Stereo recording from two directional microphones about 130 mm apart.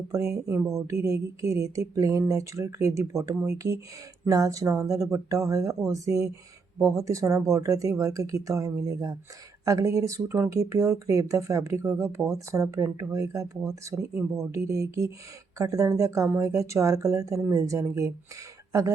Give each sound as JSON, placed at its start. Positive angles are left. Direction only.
{"t": 0.1, "sound": "speech", "side_deg": -25}